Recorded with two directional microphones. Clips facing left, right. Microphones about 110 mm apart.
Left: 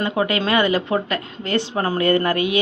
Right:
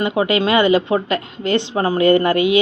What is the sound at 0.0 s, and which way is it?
Speech, 15° right (ahead or behind).